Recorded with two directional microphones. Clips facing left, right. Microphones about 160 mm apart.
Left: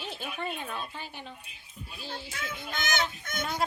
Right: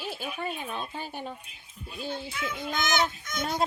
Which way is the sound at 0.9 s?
45° right (ahead or behind).